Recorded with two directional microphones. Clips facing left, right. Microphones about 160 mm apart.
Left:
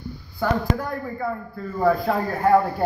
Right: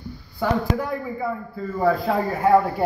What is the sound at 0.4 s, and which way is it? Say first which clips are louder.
A man's voice: right 1 dB; 5° right (ahead or behind).